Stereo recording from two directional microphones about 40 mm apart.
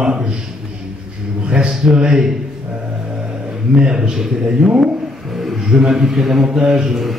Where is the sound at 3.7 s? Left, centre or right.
Centre.